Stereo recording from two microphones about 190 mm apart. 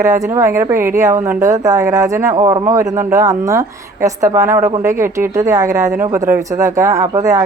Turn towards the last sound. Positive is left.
turn(degrees=-15)  # may be behind; listen again after turning